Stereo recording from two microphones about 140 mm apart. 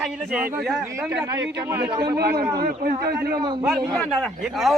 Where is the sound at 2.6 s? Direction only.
90° right.